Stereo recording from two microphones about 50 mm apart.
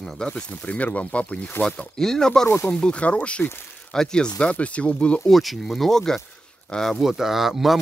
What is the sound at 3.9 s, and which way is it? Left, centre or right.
Speech, centre.